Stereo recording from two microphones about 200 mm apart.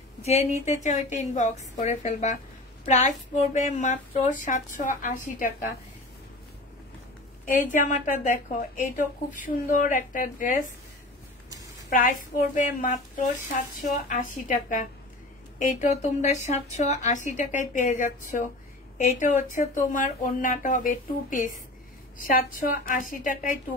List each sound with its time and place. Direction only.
0.2 s a woman's voice: 35° left (ahead or behind)
7.6 s a woman's voice: 40° left (ahead or behind)
11.9 s a woman's voice: 40° left (ahead or behind)